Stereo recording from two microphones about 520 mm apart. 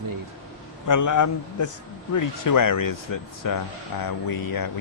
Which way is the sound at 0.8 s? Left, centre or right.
Left.